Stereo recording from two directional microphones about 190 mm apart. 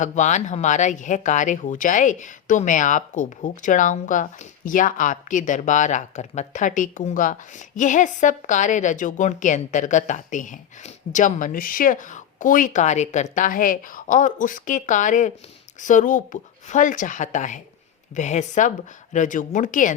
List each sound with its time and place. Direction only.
0.0 s a woman's voice: 40° left (ahead or behind)